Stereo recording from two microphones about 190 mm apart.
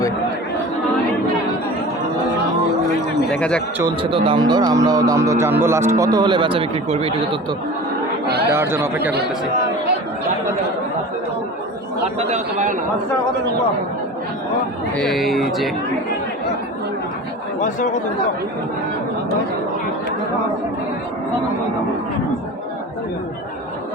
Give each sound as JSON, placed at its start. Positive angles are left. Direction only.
{"t": 3.3, "sound": "speech", "side_deg": 5}
{"t": 4.0, "sound": "speech", "side_deg": -30}
{"t": 8.4, "sound": "speech", "side_deg": -10}
{"t": 12.3, "sound": "a man's voice", "side_deg": -40}
{"t": 14.9, "sound": "speech", "side_deg": 0}
{"t": 17.6, "sound": "speech", "side_deg": 40}